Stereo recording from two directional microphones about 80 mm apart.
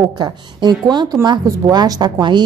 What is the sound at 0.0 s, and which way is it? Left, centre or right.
A woman's voice, right.